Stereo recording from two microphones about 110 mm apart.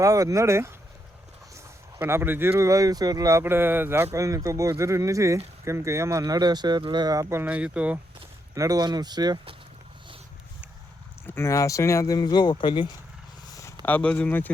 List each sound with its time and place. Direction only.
0.0 s speech: 30° right (ahead or behind)
2.0 s speech: 20° right (ahead or behind)
3.4 s speech: 20° right (ahead or behind)
7.4 s speech: 10° right (ahead or behind)
8.5 s speech: 35° right (ahead or behind)
11.3 s speech: 25° left (ahead or behind); by 12.9 s 45° left (ahead or behind)
13.5 s a sound: 30° left (ahead or behind)
13.8 s speech: 15° left (ahead or behind)